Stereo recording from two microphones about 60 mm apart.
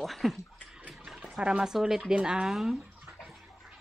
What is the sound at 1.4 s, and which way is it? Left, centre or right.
Speech, centre.